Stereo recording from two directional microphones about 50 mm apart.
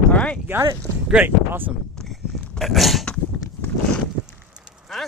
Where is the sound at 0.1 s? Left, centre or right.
Left.